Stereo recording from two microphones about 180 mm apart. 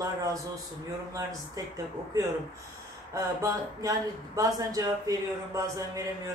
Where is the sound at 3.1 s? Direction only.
20° right (ahead or behind).